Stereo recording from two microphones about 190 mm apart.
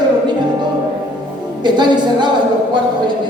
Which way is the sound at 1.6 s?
25° right (ahead or behind).